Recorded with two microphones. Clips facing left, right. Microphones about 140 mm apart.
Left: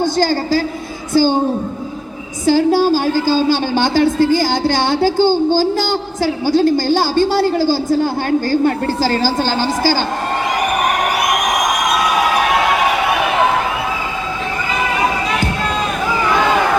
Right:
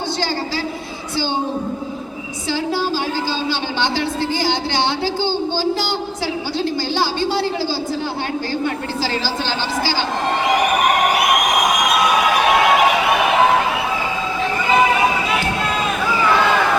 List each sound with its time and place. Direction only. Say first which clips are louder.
0.0 s a woman's voice: left 7 dB; 45° left (ahead or behind)
2.5 s a woman's voice: left 9 dB; 45° left (ahead or behind)